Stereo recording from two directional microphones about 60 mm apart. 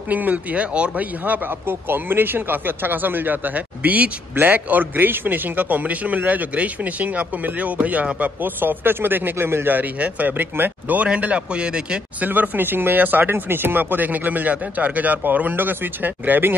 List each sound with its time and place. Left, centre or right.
0.1 s a man's voice: right
12.2 s speech: right